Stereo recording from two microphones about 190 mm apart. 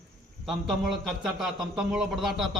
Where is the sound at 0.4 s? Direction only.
Centre (ahead or behind).